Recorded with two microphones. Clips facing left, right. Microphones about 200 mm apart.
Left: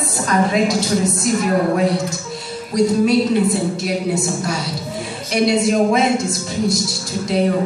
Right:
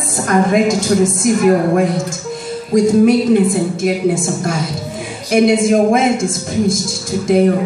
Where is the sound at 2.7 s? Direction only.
50° right (ahead or behind).